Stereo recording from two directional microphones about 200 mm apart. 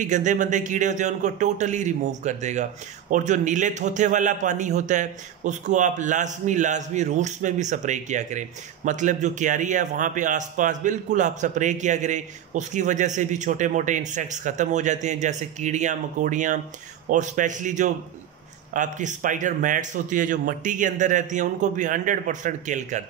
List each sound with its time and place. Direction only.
0.0 s a man's voice: 40° right (ahead or behind)